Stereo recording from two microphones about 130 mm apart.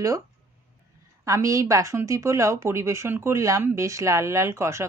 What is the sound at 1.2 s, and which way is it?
A woman's voice, 25° right (ahead or behind).